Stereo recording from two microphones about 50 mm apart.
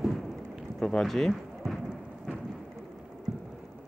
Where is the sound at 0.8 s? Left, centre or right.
Centre.